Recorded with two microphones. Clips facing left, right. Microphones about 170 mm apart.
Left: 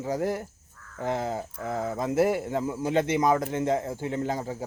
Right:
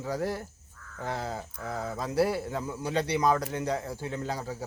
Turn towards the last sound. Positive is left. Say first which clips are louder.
# left 5 dB
turn(degrees=20)  # may be behind; listen again after turning